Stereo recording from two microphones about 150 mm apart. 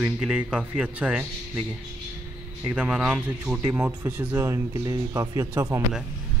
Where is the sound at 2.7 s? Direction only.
5° right (ahead or behind).